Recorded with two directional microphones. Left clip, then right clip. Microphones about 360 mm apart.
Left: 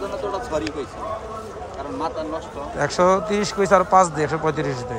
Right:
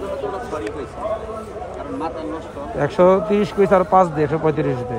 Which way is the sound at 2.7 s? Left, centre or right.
Centre.